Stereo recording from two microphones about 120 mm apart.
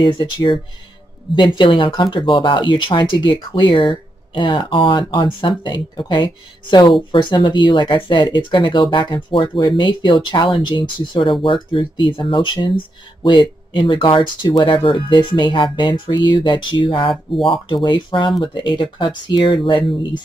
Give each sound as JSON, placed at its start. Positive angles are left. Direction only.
{"t": 0.0, "sound": "speech", "side_deg": 40}